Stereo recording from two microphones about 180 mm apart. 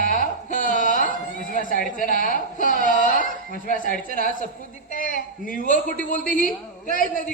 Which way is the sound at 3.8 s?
50° right (ahead or behind).